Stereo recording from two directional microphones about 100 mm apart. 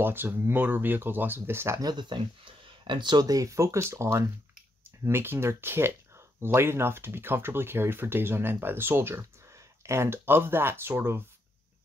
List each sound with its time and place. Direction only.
0.0 s speech: 20° right (ahead or behind)
1.8 s speech: 45° right (ahead or behind); by 11.2 s 25° right (ahead or behind)